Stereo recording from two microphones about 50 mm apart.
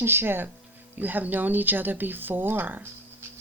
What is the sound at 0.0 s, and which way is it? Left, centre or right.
Speech, right.